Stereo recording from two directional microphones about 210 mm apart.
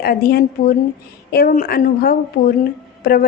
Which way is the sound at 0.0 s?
45° left (ahead or behind).